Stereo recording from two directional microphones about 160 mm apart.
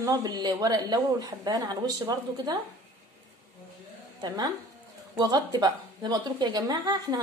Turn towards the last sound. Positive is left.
turn(degrees=-25)  # may be behind; listen again after turning